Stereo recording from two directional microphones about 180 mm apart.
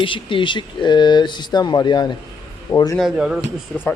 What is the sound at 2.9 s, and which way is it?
Speech, centre (ahead or behind).